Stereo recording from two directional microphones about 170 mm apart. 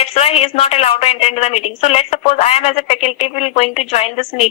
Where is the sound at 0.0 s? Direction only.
35° left (ahead or behind).